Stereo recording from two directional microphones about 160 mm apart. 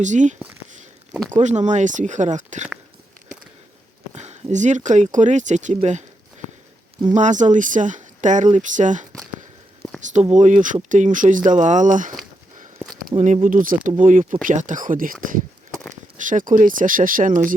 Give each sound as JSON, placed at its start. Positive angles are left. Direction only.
{"t": 0.0, "sound": "speech", "side_deg": -50}
{"t": 4.1, "sound": "speech", "side_deg": -45}
{"t": 7.1, "sound": "speech", "side_deg": -50}
{"t": 10.3, "sound": "speech", "side_deg": -50}